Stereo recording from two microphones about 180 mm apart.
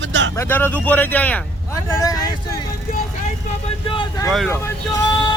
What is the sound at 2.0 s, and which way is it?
Speech, 20° left (ahead or behind).